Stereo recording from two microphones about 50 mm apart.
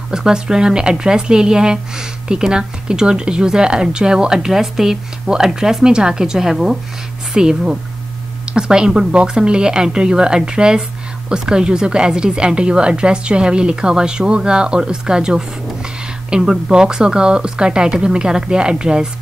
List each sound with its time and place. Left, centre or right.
0.1 s speech: centre